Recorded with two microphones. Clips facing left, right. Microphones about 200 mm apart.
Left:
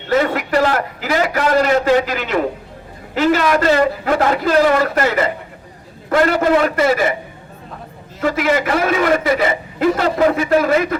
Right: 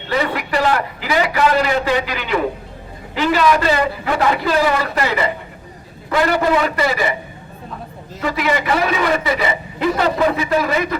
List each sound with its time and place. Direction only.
0.1 s a man's voice: 45° left (ahead or behind)
8.2 s a man's voice: 50° left (ahead or behind)